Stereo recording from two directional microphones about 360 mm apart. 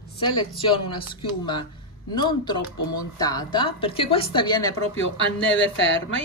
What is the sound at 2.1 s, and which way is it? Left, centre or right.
A woman's voice, centre.